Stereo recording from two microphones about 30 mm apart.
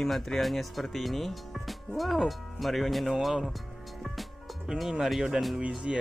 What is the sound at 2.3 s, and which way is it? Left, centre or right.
Speech, centre.